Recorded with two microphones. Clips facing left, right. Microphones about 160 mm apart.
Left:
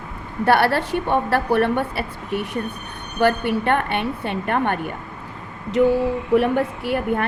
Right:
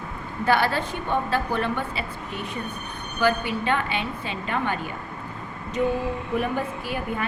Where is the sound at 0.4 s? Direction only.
65° left (ahead or behind).